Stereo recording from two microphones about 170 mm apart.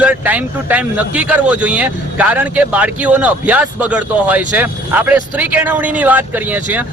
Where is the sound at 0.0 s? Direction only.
10° right (ahead or behind).